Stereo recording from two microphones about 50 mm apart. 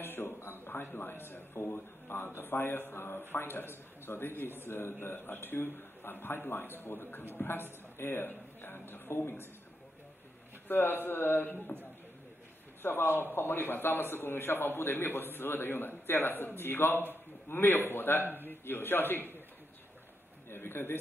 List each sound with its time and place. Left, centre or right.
0.0 s speech: left
10.7 s speech: left
12.8 s speech: left
20.4 s speech: left